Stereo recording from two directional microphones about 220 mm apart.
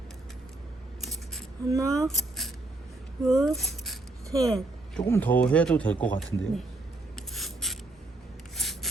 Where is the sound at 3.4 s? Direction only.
Centre (ahead or behind).